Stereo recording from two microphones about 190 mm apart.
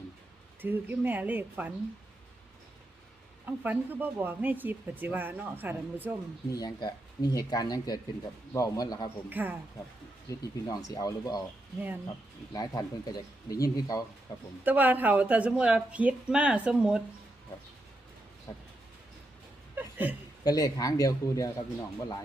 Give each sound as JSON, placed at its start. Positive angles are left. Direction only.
{"t": 0.6, "sound": "speech", "side_deg": -10}
{"t": 3.4, "sound": "speech", "side_deg": -10}
{"t": 6.5, "sound": "speech", "side_deg": 20}
{"t": 9.3, "sound": "speech", "side_deg": -10}
{"t": 10.2, "sound": "speech", "side_deg": 20}
{"t": 12.5, "sound": "speech", "side_deg": 20}
{"t": 14.6, "sound": "speech", "side_deg": -10}
{"t": 19.7, "sound": "chuckle", "side_deg": -10}
{"t": 20.4, "sound": "speech", "side_deg": 20}